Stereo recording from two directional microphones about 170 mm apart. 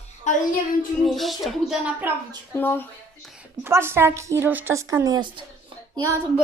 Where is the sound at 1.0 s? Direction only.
Centre (ahead or behind).